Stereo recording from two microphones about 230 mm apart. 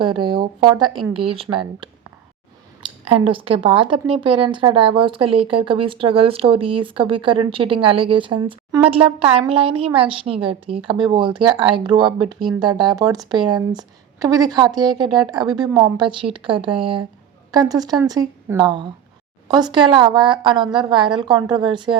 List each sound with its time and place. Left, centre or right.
0.0 s a woman's voice: right